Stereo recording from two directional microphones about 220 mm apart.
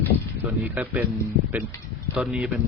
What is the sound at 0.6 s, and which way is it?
Speech, 5° right (ahead or behind).